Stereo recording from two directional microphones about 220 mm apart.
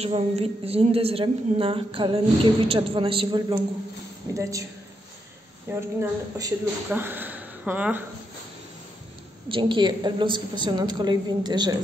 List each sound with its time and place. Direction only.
0.0 s a woman's voice: 25° right (ahead or behind)
5.7 s speech: 10° right (ahead or behind)
9.5 s a woman's voice: 20° right (ahead or behind)